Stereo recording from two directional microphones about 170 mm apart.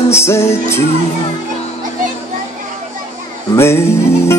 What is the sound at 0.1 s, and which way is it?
Music, 15° left (ahead or behind).